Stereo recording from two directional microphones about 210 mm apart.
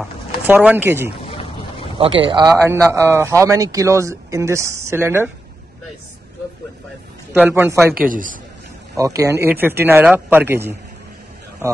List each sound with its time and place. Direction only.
0.0 s speech: 5° right (ahead or behind)
1.2 s a sound: 25° left (ahead or behind)
2.0 s speech: 25° right (ahead or behind)
7.3 s speech: 10° right (ahead or behind)
8.1 s a man's voice: 40° right (ahead or behind)
8.9 s speech: 15° right (ahead or behind)